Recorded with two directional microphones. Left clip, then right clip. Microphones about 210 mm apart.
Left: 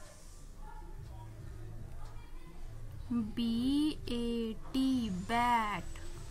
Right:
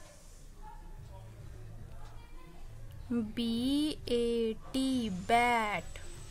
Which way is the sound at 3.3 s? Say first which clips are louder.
Even; 45° right (ahead or behind).